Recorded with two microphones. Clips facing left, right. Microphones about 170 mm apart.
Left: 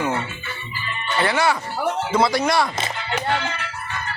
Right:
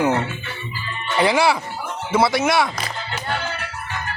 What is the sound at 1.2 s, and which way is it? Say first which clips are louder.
Speech: right 3 dB; 15° right (ahead or behind).